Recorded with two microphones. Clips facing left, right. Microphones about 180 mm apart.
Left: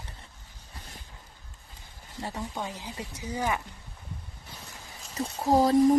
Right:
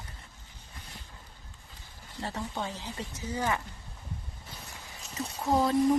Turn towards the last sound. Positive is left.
turn(degrees=35)  # may be behind; listen again after turning